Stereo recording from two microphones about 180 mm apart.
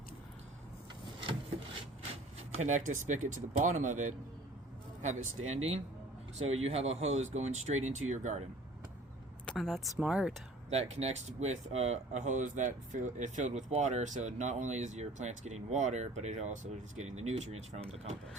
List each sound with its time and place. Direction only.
1.2 s a sound: 30° right (ahead or behind)
2.5 s speech: 40° right (ahead or behind)
9.5 s speech: centre (ahead or behind)
10.7 s speech: 35° right (ahead or behind)